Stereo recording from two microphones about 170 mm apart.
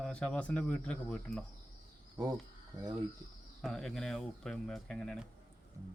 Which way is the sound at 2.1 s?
20° right (ahead or behind).